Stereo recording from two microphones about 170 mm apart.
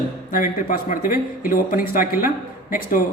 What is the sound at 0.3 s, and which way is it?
A woman's voice, 50° left (ahead or behind).